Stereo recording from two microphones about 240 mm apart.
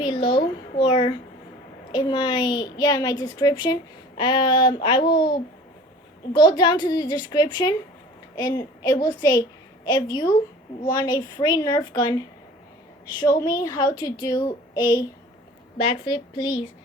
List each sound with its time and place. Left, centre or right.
0.0 s a sound: left
0.9 s a woman's voice: left
6.3 s a woman's voice: centre
13.4 s a woman's voice: centre